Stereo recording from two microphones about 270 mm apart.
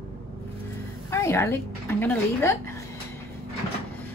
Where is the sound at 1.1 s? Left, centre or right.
Centre.